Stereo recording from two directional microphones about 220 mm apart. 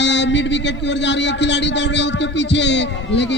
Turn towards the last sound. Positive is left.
turn(degrees=55)  # may be behind; listen again after turning